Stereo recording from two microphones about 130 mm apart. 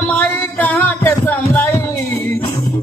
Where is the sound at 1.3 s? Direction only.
15° left (ahead or behind).